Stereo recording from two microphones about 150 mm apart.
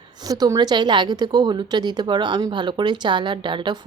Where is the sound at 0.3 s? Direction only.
25° right (ahead or behind).